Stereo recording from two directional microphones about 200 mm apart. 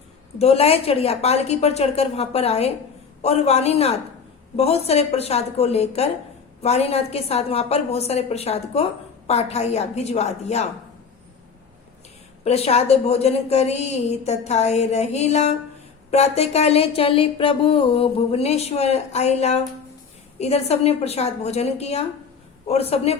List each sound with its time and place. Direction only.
0.3 s a woman's voice: 30° left (ahead or behind)
12.5 s a woman's voice: 30° left (ahead or behind)